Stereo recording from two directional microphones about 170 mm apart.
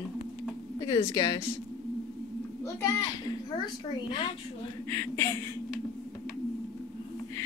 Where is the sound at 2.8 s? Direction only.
25° left (ahead or behind).